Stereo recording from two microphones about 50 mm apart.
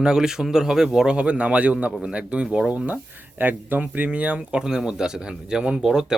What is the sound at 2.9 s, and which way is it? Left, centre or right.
Speech, right.